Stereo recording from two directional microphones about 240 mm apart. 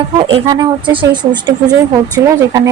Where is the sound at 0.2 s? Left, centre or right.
Right.